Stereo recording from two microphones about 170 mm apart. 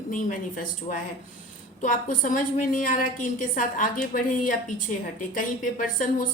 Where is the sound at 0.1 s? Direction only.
50° left (ahead or behind).